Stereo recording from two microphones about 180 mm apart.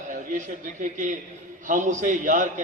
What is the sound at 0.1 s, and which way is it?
A man's voice, 45° right (ahead or behind).